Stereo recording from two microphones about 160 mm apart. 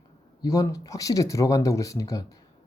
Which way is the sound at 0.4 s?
20° left (ahead or behind).